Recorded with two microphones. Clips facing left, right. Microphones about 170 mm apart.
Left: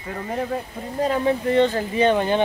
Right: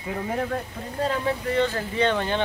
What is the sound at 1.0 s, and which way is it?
Speech, 20° left (ahead or behind).